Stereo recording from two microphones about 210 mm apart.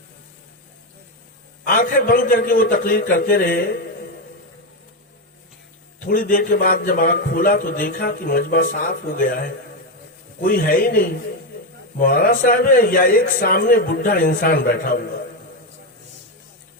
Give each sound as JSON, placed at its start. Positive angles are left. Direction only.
{"t": 1.6, "sound": "a man's voice", "side_deg": 40}
{"t": 6.1, "sound": "a man's voice", "side_deg": 40}